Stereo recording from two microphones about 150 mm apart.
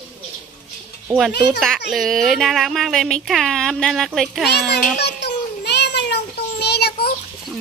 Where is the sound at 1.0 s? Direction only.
5° right (ahead or behind).